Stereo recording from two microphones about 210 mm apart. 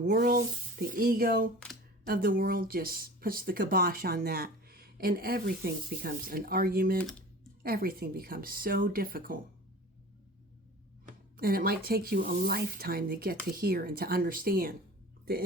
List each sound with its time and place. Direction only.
0.0 s speech: 45° right (ahead or behind)
11.0 s speech: 45° right (ahead or behind)